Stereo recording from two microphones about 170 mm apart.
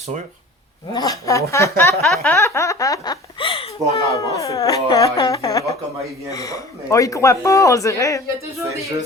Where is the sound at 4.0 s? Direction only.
20° left (ahead or behind).